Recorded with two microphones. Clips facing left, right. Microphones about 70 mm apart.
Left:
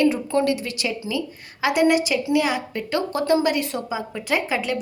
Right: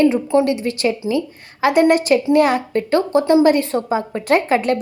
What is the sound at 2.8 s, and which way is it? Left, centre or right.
A woman's voice, right.